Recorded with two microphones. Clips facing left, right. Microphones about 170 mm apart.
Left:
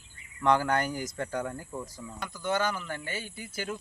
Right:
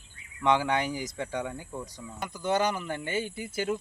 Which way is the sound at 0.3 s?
Centre (ahead or behind).